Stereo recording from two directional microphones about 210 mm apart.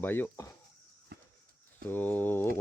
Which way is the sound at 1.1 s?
45° right (ahead or behind).